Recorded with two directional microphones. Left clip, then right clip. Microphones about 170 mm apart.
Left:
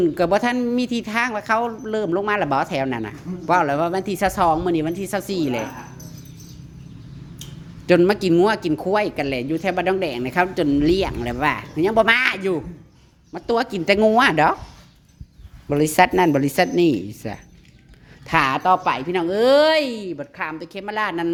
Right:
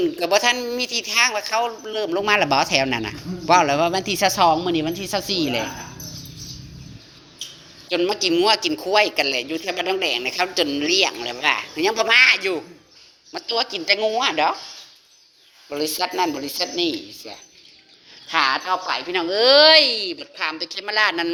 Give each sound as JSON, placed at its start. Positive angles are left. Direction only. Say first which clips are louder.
{"t": 0.0, "sound": "speech", "louder": "even", "side_deg": 25}
{"t": 7.9, "sound": "speech", "louder": "left 6 dB", "side_deg": 40}
{"t": 8.3, "sound": "speech", "louder": "left 1 dB", "side_deg": 25}
{"t": 13.5, "sound": "speech", "louder": "left 2 dB", "side_deg": 40}
{"t": 15.7, "sound": "speech", "louder": "left 8 dB", "side_deg": 50}
{"t": 19.1, "sound": "a woman's voice", "louder": "right 2 dB", "side_deg": 30}